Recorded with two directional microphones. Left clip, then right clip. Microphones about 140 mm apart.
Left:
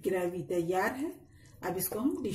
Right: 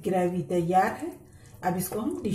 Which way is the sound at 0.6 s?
60° left (ahead or behind).